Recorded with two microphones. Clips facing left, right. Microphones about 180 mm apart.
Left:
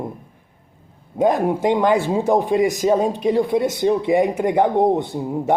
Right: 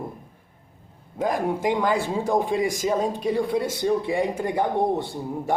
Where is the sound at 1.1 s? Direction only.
25° left (ahead or behind).